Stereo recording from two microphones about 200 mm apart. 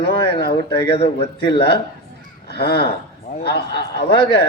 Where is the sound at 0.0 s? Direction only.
50° left (ahead or behind).